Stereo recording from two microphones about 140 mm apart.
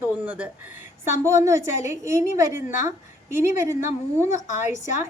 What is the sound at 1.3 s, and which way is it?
A woman's voice, 20° right (ahead or behind).